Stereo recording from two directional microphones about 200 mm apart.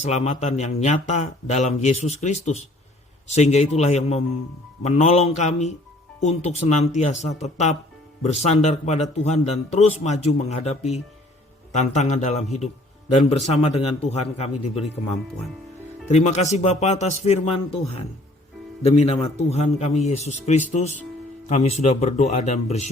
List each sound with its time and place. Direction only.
0.0 s a man's voice: 35° left (ahead or behind)
16.0 s a man's voice: 35° left (ahead or behind)